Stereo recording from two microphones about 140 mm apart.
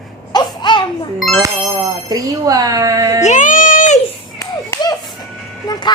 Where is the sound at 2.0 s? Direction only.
25° right (ahead or behind).